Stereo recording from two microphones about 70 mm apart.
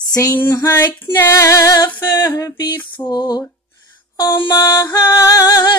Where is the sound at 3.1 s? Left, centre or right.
Left.